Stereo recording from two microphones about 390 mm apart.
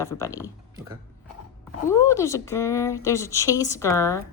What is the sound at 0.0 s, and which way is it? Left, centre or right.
Speech, centre.